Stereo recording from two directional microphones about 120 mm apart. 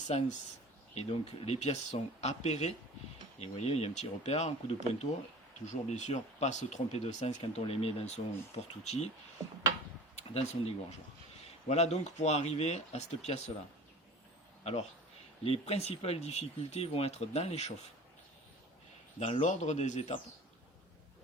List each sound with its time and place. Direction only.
0.1 s speech: 65° left (ahead or behind)
5.6 s speech: 80° left
7.6 s speech: 55° left (ahead or behind)
10.2 s speech: 60° left (ahead or behind)
14.6 s a man's voice: 65° left (ahead or behind)
19.2 s speech: 75° left (ahead or behind)